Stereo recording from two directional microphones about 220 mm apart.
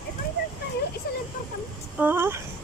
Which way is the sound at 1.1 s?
45° left (ahead or behind).